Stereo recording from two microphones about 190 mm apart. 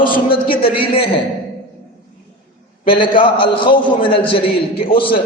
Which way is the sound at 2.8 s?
25° left (ahead or behind).